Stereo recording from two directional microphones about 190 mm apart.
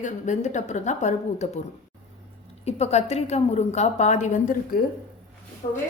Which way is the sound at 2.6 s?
35° left (ahead or behind).